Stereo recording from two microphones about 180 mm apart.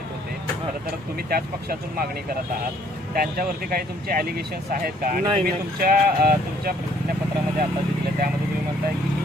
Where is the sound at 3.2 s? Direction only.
55° right (ahead or behind).